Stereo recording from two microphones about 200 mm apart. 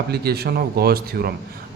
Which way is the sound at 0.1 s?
55° right (ahead or behind).